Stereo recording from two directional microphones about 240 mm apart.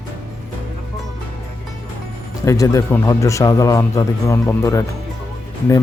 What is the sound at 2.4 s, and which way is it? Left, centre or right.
Speech, centre.